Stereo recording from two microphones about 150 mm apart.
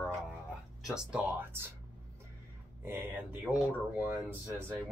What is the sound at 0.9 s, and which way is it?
Speech, 10° right (ahead or behind).